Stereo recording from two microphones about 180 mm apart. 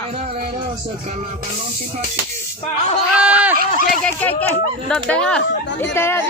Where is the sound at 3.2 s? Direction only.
5° right (ahead or behind).